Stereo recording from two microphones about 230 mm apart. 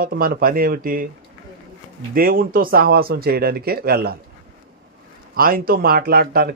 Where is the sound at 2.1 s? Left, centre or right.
Right.